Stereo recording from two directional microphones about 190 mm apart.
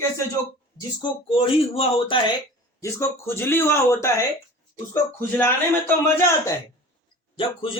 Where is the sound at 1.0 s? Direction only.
30° left (ahead or behind).